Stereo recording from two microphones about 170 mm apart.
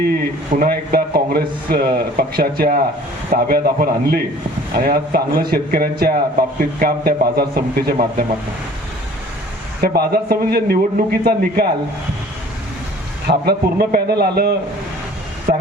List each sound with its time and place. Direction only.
0.6 s a man's voice: 65° right (ahead or behind)
9.8 s a man's voice: 65° right (ahead or behind)
13.2 s a man's voice: 65° right (ahead or behind)